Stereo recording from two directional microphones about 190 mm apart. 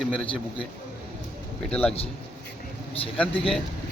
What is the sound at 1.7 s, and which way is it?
Speech, 5° left (ahead or behind).